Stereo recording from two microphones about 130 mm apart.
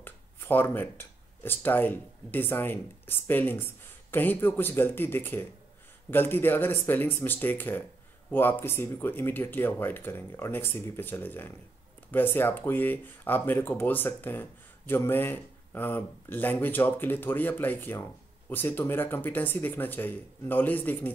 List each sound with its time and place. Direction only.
0.0 s speech: 15° left (ahead or behind)